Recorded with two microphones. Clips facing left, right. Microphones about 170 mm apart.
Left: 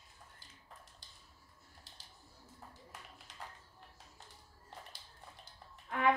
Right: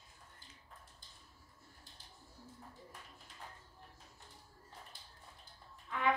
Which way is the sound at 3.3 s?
90° left.